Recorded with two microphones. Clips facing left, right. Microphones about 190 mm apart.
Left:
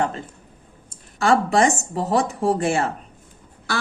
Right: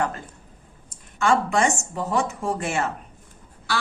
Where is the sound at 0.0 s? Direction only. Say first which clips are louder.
Left 2 dB; 25° left (ahead or behind).